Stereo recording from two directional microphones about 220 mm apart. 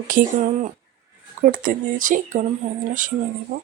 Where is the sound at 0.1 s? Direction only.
35° right (ahead or behind).